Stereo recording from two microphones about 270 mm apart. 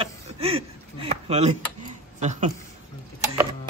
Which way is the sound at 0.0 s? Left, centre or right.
Right.